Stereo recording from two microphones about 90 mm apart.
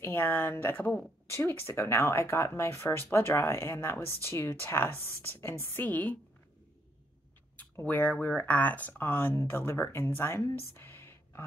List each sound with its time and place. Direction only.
0.0 s speech: 25° left (ahead or behind)
7.8 s speech: 15° left (ahead or behind)